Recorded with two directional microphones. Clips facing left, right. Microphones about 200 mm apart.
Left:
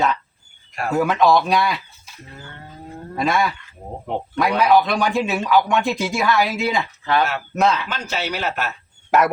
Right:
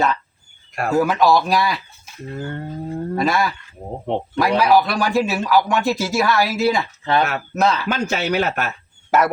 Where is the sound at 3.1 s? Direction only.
Centre (ahead or behind).